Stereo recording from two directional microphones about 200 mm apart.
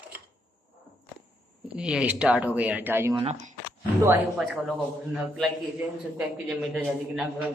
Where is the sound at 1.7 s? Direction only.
5° right (ahead or behind).